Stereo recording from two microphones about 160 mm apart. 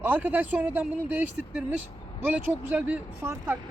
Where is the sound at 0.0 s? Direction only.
10° right (ahead or behind).